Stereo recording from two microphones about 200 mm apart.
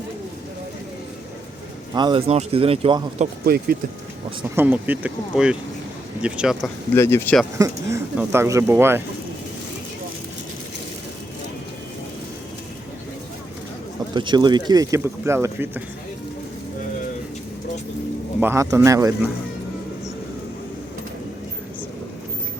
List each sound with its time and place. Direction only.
1.9 s speech: 20° right (ahead or behind)
3.4 s speech: 50° right (ahead or behind)
4.5 s speech: 10° right (ahead or behind)
6.9 s speech: 10° left (ahead or behind)
7.6 s speech: 15° right (ahead or behind)
14.1 s speech: 20° right (ahead or behind)
18.3 s speech: 10° right (ahead or behind)